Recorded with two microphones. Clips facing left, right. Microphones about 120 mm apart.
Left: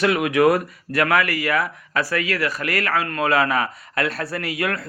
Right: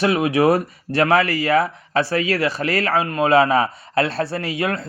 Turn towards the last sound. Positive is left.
turn(degrees=-25)  # may be behind; listen again after turning